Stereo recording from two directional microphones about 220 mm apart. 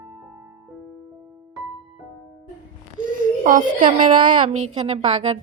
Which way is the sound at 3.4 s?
35° right (ahead or behind).